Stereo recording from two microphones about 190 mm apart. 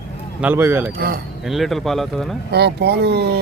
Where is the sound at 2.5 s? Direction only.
60° right (ahead or behind).